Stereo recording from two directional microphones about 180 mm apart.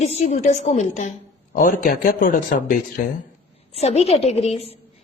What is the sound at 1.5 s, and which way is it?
Speech, 50° left (ahead or behind).